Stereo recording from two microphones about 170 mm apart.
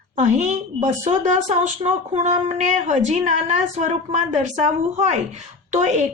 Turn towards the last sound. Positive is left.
turn(degrees=-45)  # may be behind; listen again after turning